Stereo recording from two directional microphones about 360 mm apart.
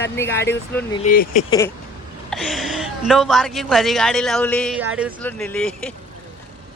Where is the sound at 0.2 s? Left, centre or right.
Centre.